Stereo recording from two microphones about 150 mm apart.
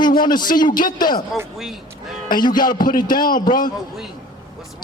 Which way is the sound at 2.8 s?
70° left (ahead or behind).